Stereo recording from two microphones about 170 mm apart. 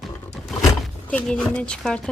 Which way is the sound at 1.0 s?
10° left (ahead or behind).